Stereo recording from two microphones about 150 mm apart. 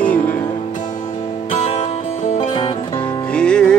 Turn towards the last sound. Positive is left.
turn(degrees=5)  # may be behind; listen again after turning